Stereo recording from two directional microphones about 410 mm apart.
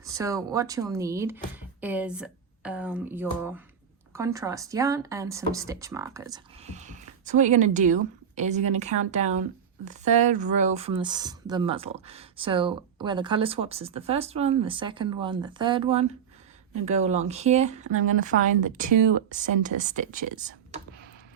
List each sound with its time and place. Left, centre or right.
0.0 s speech: centre
19.4 s speech: centre